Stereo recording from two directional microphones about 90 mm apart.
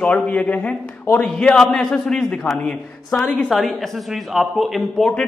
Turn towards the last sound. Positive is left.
turn(degrees=5)  # may be behind; listen again after turning